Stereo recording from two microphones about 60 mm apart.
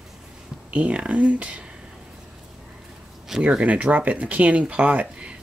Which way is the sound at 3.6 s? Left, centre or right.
Right.